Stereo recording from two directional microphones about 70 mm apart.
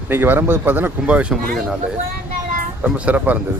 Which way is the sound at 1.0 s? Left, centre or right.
Centre.